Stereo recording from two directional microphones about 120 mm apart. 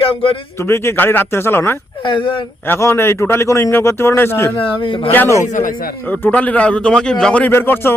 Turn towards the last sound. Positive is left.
turn(degrees=15)  # may be behind; listen again after turning